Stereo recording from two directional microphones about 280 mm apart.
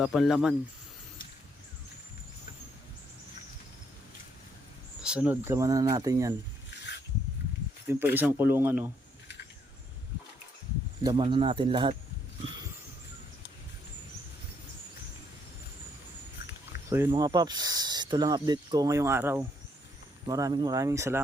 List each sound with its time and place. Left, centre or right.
0.0 s speech: centre
5.0 s speech: centre
7.9 s speech: centre
11.0 s speech: centre
16.9 s speech: centre